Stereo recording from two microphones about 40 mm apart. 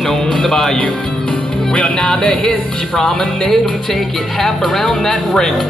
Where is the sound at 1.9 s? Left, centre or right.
Centre.